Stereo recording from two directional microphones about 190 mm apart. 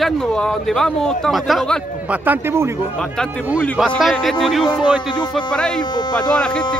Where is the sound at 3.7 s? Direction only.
Centre (ahead or behind).